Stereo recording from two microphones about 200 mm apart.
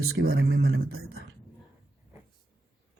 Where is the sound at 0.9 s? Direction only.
90° right.